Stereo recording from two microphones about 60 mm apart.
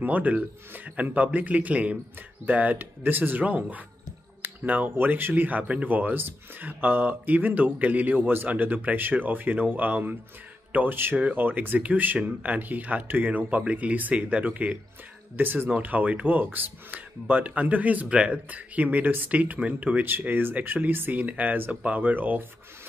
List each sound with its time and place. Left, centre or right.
0.0 s speech: right
20.1 s speech: right